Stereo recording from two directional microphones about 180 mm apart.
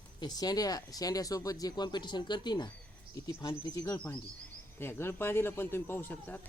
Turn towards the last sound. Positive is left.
turn(degrees=10)  # may be behind; listen again after turning